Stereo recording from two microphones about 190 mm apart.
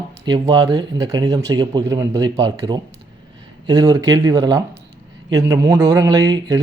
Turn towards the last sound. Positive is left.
turn(degrees=-20)  # may be behind; listen again after turning